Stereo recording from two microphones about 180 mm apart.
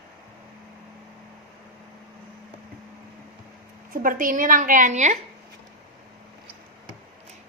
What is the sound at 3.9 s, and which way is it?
A woman's voice, 50° right (ahead or behind).